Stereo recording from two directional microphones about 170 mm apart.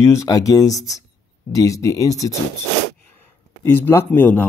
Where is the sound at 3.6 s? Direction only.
10° left (ahead or behind).